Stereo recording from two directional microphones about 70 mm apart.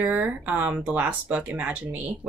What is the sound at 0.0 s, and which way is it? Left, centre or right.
Speech, right.